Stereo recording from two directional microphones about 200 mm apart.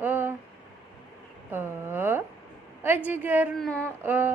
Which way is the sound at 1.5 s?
10° right (ahead or behind).